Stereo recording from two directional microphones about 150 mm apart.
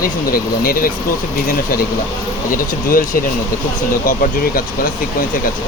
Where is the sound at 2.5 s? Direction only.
70° left (ahead or behind).